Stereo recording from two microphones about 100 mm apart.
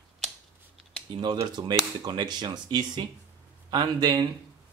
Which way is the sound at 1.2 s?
45° right (ahead or behind).